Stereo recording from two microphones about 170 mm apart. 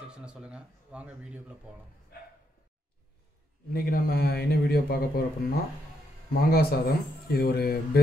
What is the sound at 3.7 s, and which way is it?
Speech, 60° left (ahead or behind).